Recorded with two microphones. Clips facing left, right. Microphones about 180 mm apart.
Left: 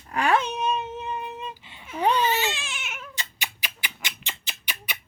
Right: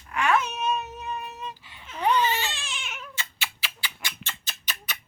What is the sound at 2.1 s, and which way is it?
Cat, 10° left (ahead or behind).